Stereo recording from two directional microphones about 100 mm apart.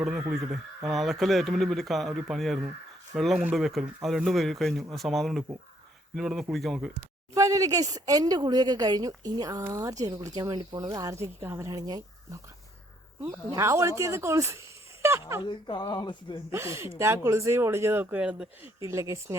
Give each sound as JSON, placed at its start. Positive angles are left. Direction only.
{"t": 0.0, "sound": "speech", "side_deg": -5}
{"t": 7.3, "sound": "speech", "side_deg": -35}
{"t": 15.4, "sound": "speech", "side_deg": 50}
{"t": 16.5, "sound": "speech", "side_deg": -25}
{"t": 18.8, "sound": "speech", "side_deg": -30}